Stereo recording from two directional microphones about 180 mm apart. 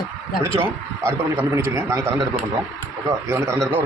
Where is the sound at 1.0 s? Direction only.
15° right (ahead or behind).